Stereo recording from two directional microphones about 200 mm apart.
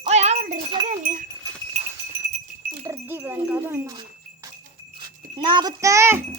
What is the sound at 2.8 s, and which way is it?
A child's voice, 10° right (ahead or behind).